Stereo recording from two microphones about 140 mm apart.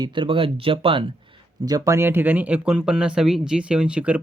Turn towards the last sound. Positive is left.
turn(degrees=-10)  # may be behind; listen again after turning